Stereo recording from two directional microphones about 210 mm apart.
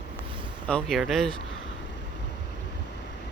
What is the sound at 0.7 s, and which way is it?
Speech, 5° left (ahead or behind).